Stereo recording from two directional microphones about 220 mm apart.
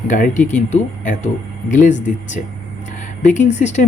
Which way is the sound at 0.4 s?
35° left (ahead or behind).